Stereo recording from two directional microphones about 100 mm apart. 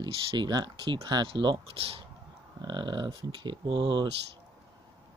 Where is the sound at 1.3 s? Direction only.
60° right (ahead or behind).